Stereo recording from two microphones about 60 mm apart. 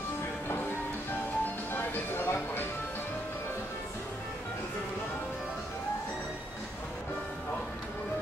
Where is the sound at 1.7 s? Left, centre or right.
Left.